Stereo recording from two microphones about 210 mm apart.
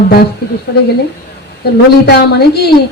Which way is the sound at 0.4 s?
50° left (ahead or behind).